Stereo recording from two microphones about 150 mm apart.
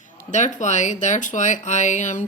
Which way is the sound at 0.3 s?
50° left (ahead or behind).